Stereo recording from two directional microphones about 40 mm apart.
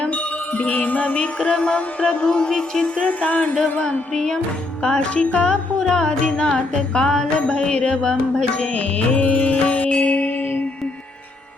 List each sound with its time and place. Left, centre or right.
0.0 s music: left; by 3.1 s centre
3.1 s music: left
3.5 s music: centre
8.6 s music: left